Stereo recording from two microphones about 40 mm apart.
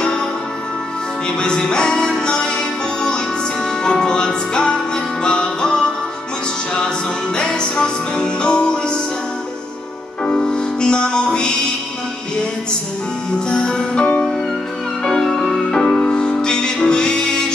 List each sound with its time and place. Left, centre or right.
1.4 s music: centre
3.8 s music: centre
7.3 s music: left
10.2 s music: left
13.5 s music: centre
15.0 s music: centre